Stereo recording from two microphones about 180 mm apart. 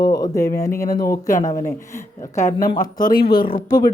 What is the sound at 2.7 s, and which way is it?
Speech, 50° left (ahead or behind).